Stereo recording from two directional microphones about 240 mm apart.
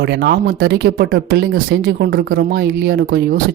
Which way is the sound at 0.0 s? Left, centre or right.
Right.